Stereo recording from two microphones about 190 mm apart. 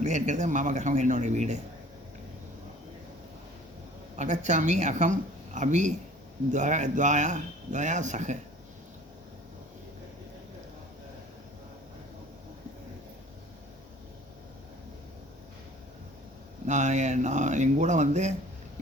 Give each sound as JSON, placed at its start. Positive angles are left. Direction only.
{"t": 0.0, "sound": "a man's voice", "side_deg": -40}
{"t": 4.2, "sound": "a man's voice", "side_deg": -40}
{"t": 16.6, "sound": "a man's voice", "side_deg": -40}